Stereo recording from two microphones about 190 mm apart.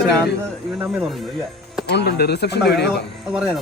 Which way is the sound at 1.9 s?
60° left (ahead or behind).